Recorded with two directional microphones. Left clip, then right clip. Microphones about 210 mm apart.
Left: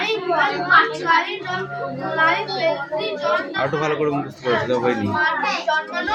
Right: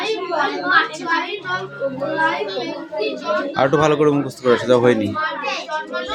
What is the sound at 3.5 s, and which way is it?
Speech, 30° right (ahead or behind).